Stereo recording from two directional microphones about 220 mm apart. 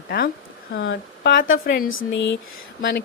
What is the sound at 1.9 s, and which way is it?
Speech, 60° left (ahead or behind).